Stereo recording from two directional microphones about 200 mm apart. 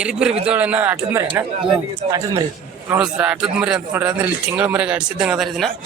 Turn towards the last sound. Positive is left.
turn(degrees=0)  # may be behind; listen again after turning